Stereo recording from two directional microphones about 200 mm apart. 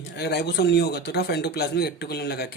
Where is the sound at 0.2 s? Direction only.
55° left (ahead or behind).